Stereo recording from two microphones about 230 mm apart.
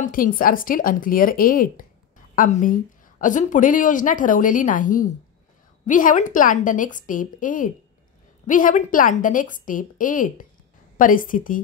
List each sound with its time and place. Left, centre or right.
0.0 s a woman's voice: left